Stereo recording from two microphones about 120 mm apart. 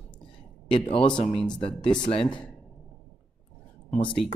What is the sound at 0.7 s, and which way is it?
A man's voice, 45° left (ahead or behind).